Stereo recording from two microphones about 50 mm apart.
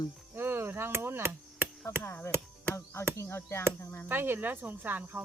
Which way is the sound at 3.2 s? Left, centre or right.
Left.